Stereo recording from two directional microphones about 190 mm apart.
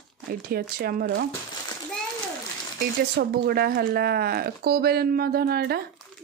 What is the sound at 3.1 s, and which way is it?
Speech, 55° right (ahead or behind).